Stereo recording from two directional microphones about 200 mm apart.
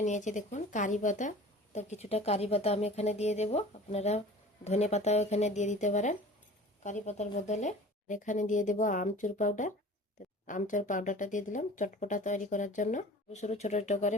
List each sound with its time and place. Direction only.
0.0 s speech: 35° left (ahead or behind)